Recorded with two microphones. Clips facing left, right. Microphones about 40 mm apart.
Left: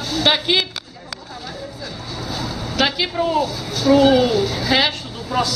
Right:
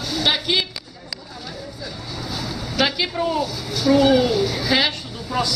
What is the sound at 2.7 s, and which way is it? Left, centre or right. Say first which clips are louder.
Speech: left 2 dB; centre.